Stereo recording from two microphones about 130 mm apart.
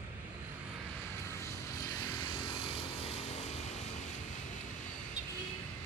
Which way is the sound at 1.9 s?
30° left (ahead or behind).